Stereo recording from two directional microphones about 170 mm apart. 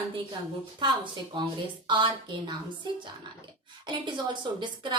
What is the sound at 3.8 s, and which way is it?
A woman's voice, 25° right (ahead or behind).